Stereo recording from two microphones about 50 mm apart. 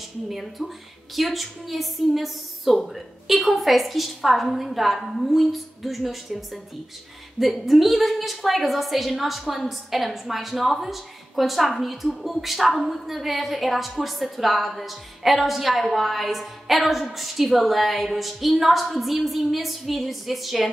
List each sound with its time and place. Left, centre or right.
0.3 s a woman's voice: centre